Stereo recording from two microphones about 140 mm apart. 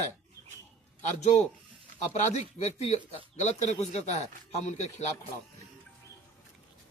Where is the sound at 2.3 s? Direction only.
50° left (ahead or behind).